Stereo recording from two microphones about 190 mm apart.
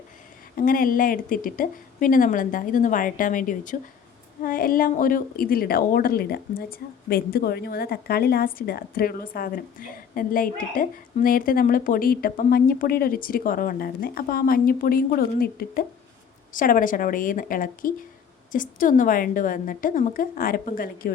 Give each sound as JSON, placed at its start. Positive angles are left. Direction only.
{"t": 0.5, "sound": "a woman's voice", "side_deg": 50}